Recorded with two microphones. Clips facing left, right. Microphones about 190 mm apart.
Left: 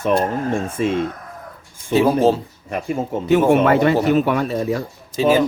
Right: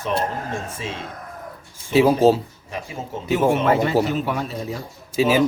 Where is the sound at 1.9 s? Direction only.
10° right (ahead or behind).